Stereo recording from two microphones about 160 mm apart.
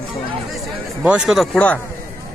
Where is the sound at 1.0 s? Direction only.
5° right (ahead or behind).